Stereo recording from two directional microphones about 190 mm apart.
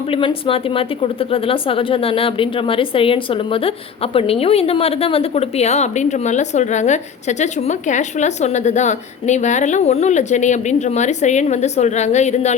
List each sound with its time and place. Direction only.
0.1 s a woman's voice: 25° left (ahead or behind)